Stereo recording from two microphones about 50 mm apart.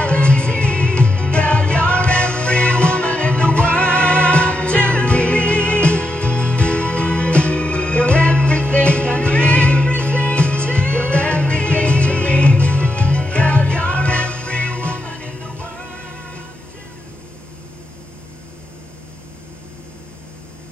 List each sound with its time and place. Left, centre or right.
0.0 s music: left